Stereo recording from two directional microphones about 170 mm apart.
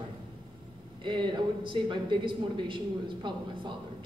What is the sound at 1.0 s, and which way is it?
A man's voice, 30° right (ahead or behind).